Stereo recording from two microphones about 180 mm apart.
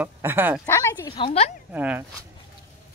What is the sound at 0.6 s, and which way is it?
Speech, 15° left (ahead or behind).